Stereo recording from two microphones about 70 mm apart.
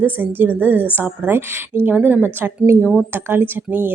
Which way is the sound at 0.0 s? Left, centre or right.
Right.